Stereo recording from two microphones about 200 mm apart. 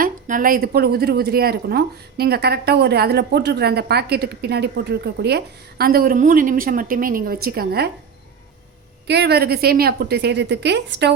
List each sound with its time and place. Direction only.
0.0 s speech: 45° right (ahead or behind)
9.0 s a woman's voice: 55° right (ahead or behind)